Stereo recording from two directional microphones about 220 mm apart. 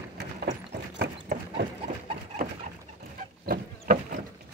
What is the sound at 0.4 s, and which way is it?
Clip-clop, 50° right (ahead or behind).